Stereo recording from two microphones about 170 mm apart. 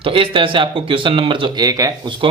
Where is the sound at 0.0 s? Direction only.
30° right (ahead or behind).